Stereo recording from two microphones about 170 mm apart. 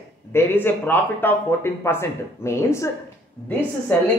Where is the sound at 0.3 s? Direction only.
15° left (ahead or behind).